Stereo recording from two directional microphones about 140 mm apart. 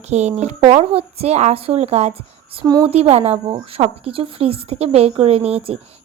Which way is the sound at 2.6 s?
25° right (ahead or behind).